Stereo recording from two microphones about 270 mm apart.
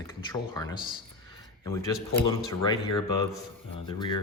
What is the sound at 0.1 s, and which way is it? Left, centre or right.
Speech, centre.